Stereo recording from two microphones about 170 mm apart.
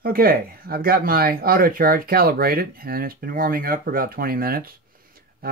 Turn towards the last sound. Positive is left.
turn(degrees=-60)  # may be behind; listen again after turning